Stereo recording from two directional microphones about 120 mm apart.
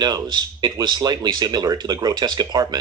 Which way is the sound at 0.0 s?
35° right (ahead or behind).